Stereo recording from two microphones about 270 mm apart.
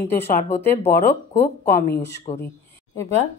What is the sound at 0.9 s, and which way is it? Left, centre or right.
Speech, left.